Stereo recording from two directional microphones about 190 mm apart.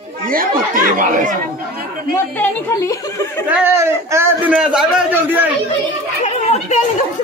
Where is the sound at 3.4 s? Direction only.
10° right (ahead or behind).